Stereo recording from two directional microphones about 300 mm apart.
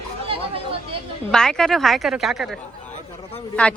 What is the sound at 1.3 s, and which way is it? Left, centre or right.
A woman's voice, centre.